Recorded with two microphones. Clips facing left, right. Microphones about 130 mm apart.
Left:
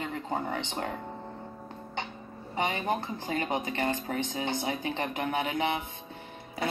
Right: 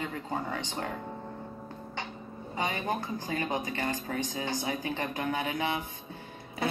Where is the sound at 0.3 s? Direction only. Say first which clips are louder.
Left 3 dB; 25° left (ahead or behind).